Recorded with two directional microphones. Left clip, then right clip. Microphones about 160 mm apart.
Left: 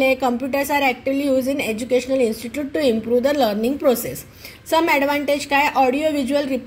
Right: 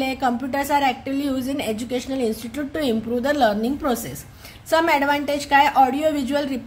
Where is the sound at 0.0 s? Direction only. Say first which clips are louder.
Left 5 dB; centre (ahead or behind).